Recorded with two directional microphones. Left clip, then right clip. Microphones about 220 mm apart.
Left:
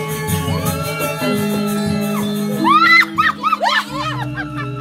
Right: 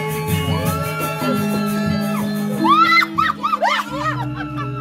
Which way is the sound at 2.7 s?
55° right (ahead or behind).